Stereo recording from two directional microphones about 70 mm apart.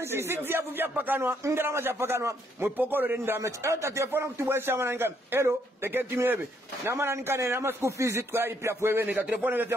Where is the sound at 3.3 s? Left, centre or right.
Right.